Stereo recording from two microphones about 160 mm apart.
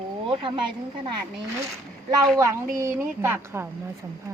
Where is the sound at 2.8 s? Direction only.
15° right (ahead or behind).